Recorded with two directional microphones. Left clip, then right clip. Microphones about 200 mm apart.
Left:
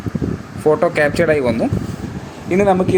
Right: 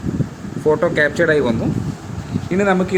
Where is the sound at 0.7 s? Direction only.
20° left (ahead or behind).